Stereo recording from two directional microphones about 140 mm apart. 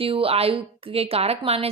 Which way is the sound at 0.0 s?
40° right (ahead or behind).